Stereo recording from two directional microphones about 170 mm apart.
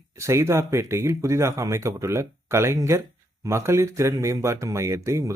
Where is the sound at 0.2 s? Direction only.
15° right (ahead or behind).